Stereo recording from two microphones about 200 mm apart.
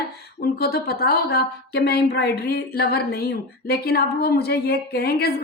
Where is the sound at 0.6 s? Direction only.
50° left (ahead or behind).